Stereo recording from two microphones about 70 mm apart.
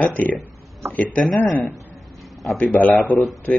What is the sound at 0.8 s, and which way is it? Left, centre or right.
Speech, right.